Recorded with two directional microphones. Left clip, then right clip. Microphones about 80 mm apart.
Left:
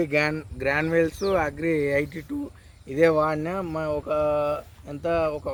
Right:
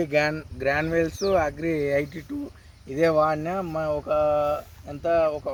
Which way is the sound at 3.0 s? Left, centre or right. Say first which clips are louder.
Even; left.